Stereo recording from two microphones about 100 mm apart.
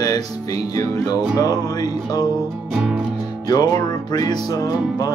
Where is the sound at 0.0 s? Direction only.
40° left (ahead or behind).